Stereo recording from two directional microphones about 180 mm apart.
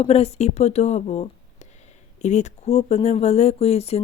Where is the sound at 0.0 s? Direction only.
35° left (ahead or behind).